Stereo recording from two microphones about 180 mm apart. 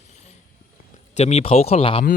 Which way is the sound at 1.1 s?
35° left (ahead or behind).